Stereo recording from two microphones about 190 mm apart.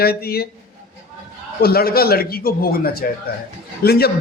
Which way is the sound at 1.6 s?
55° left (ahead or behind).